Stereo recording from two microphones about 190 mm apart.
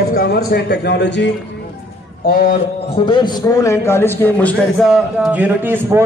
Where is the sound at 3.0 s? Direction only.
25° left (ahead or behind).